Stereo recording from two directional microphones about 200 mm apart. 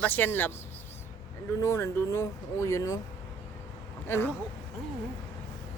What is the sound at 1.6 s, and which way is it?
Speech, 15° left (ahead or behind).